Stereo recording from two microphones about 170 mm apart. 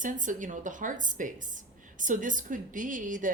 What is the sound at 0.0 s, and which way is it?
A woman's voice, 50° right (ahead or behind).